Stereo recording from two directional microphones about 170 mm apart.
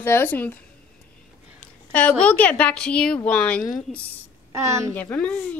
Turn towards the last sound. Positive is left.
turn(degrees=10)  # may be behind; listen again after turning